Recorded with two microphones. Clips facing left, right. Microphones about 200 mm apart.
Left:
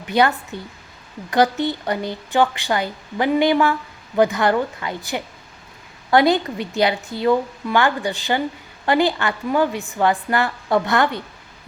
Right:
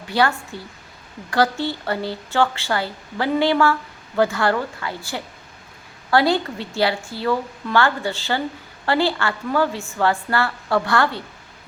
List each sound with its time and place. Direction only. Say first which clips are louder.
0.1 s a woman's voice: left 2 dB; 20° left (ahead or behind)